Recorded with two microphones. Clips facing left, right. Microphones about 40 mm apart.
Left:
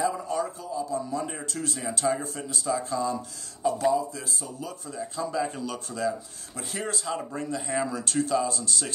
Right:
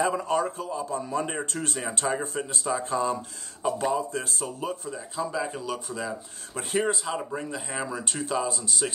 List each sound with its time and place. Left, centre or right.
0.0 s a man's voice: right
4.9 s speech: centre
6.5 s a man's voice: right
6.9 s speech: centre